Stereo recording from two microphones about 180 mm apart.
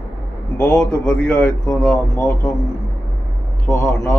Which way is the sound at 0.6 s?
15° left (ahead or behind).